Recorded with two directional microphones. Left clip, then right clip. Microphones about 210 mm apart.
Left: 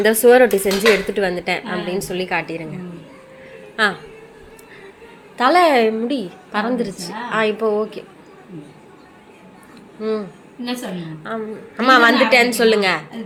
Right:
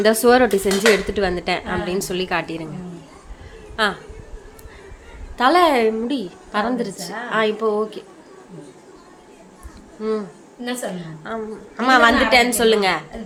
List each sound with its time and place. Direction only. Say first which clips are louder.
0.0 s a woman's voice: left 3 dB; 15° right (ahead or behind)
3.8 s a woman's voice: left 2 dB; centre (ahead or behind)
5.4 s a woman's voice: left 2 dB; 5° right (ahead or behind)
10.0 s a woman's voice: left 1 dB; 10° right (ahead or behind)